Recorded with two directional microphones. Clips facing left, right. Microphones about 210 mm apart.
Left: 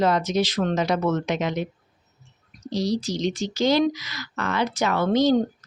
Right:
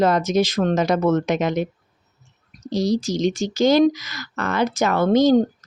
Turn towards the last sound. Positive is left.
turn(degrees=-45)  # may be behind; listen again after turning